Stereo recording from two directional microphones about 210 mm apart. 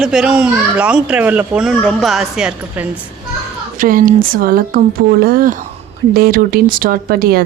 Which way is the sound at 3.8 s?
40° right (ahead or behind).